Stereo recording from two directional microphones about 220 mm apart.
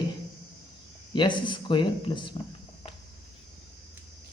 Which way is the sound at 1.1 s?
20° left (ahead or behind).